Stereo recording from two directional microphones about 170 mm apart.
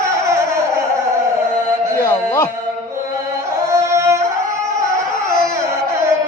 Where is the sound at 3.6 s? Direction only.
20° right (ahead or behind).